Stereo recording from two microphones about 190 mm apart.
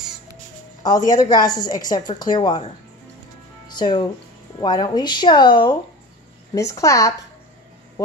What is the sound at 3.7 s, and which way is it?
A woman's voice, 25° left (ahead or behind).